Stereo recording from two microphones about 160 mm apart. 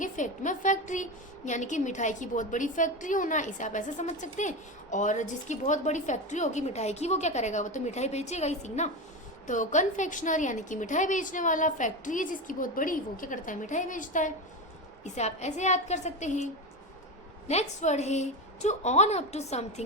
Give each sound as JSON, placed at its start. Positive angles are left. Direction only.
{"t": 0.0, "sound": "a woman's voice", "side_deg": 50}
{"t": 17.5, "sound": "a woman's voice", "side_deg": 45}